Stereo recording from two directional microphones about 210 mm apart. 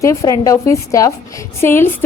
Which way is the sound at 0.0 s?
15° left (ahead or behind).